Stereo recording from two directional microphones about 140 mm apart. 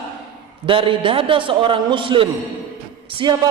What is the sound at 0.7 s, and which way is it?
A man's voice, 40° right (ahead or behind).